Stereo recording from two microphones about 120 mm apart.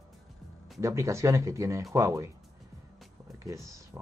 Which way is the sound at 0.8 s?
25° right (ahead or behind).